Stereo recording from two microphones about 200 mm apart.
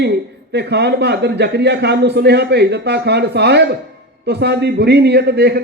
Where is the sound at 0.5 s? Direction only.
55° right (ahead or behind).